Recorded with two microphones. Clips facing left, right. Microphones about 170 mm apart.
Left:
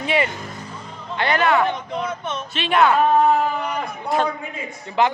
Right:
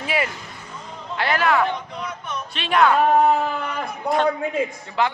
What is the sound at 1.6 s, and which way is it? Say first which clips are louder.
Speech: left 3 dB; 20° left (ahead or behind).